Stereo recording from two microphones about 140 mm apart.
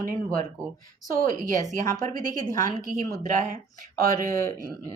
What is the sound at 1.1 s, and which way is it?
A woman's voice, 75° right (ahead or behind).